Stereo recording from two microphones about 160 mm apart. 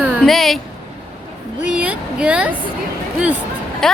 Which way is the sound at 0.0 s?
Centre (ahead or behind).